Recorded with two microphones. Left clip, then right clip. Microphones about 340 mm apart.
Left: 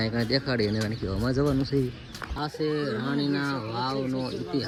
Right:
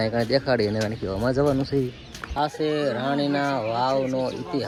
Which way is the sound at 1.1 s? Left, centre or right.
Right.